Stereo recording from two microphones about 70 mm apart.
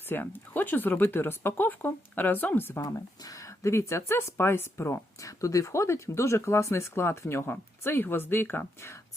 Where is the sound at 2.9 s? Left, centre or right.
Left.